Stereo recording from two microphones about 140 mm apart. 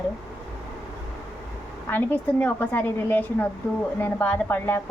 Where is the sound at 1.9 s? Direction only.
10° left (ahead or behind).